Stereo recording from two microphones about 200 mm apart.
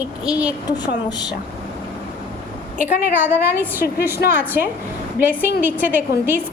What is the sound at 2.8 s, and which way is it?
A woman's voice, 10° right (ahead or behind).